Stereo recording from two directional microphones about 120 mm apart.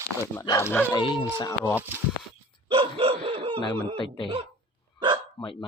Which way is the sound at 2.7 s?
50° right (ahead or behind).